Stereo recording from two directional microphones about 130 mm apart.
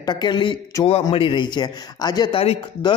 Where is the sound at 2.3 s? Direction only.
45° left (ahead or behind).